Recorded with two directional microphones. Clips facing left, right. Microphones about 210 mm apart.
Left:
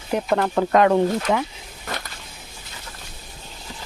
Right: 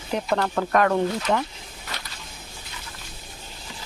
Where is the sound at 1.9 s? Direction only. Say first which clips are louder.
Left 7 dB; 50° left (ahead or behind).